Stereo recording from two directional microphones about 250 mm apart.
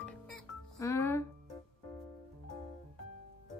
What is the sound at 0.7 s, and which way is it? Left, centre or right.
Music, centre.